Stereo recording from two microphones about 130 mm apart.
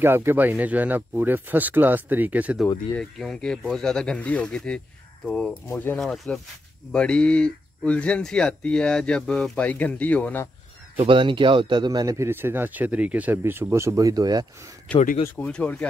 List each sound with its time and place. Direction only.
0.0 s speech: 15° right (ahead or behind)
3.0 s speech: 5° left (ahead or behind)
5.7 s speech: 15° left (ahead or behind)
5.9 s speech: centre (ahead or behind)
11.0 s speech: 40° right (ahead or behind)
14.9 s speech: 10° left (ahead or behind)